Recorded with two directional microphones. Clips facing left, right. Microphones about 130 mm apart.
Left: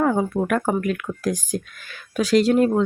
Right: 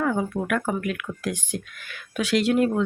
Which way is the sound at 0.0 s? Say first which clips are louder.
Left 4 dB; 35° left (ahead or behind).